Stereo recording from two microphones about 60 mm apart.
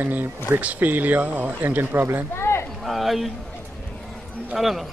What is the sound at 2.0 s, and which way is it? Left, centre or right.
Speech, right.